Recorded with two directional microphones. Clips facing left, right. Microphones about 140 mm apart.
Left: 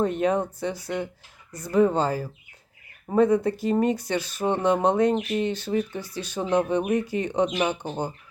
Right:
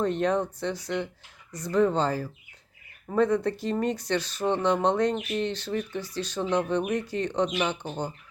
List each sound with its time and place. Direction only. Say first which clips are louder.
0.0 s speech: left 2 dB; 10° left (ahead or behind)